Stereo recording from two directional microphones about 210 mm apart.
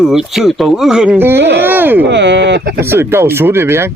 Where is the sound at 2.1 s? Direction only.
55° right (ahead or behind).